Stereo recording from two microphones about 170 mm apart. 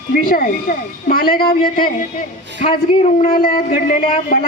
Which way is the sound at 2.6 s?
45° left (ahead or behind).